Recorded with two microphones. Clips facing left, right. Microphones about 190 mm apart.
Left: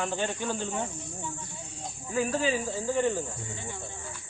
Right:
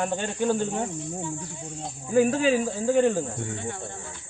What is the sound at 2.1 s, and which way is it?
Speech, 60° right (ahead or behind).